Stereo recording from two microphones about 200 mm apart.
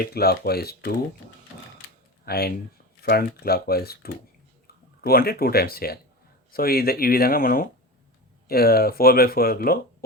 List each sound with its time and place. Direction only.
0.1 s speech: 50° left (ahead or behind)
2.2 s speech: 50° left (ahead or behind)